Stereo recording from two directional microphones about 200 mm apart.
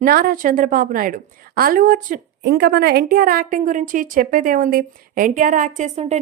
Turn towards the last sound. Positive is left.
turn(degrees=-35)  # may be behind; listen again after turning